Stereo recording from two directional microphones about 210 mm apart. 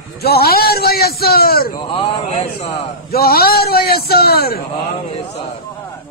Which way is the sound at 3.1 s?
45° left (ahead or behind).